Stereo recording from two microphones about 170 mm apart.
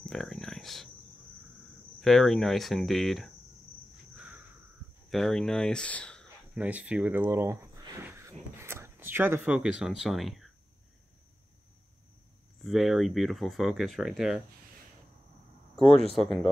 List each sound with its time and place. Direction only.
0.0 s a sound: 5° left (ahead or behind)
2.0 s speech: centre (ahead or behind)
5.1 s speech: centre (ahead or behind)
6.5 s speech: 10° right (ahead or behind)
12.6 s speech: centre (ahead or behind)
15.9 s speech: 35° left (ahead or behind)
16.2 s speech: centre (ahead or behind)